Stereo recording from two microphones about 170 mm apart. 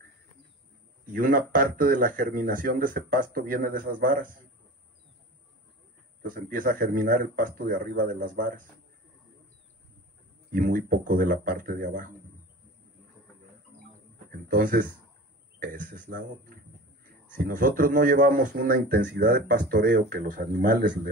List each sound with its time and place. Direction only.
1.0 s speech: 55° right (ahead or behind)
6.2 s speech: 55° right (ahead or behind)
10.5 s a man's voice: 55° right (ahead or behind)
14.5 s a man's voice: 55° right (ahead or behind)
19.0 s speech: 65° right (ahead or behind)